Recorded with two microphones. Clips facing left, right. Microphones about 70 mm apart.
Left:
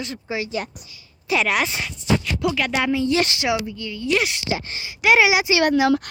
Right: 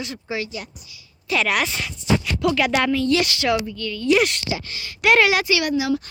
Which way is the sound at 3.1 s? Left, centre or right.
Left.